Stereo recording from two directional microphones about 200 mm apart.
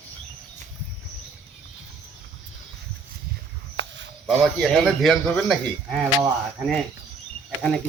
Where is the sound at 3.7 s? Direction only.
65° right (ahead or behind).